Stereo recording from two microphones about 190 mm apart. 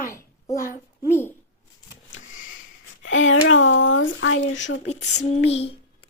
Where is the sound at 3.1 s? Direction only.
90° left.